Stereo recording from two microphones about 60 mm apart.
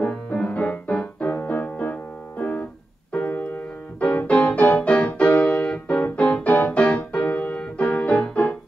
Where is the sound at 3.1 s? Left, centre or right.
Left.